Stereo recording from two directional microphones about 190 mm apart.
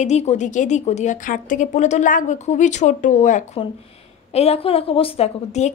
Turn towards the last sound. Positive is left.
turn(degrees=35)  # may be behind; listen again after turning